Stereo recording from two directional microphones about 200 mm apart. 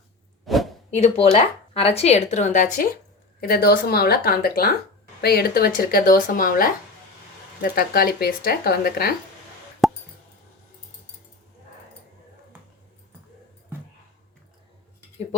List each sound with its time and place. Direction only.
0.4 s a sound: centre (ahead or behind)
0.9 s speech: 35° left (ahead or behind); by 9.1 s 50° left (ahead or behind)
9.8 s plop: centre (ahead or behind)